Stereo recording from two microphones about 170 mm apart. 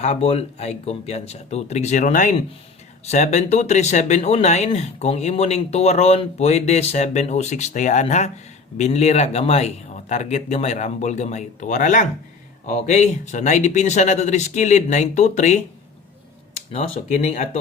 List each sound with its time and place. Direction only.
0.0 s speech: 40° left (ahead or behind)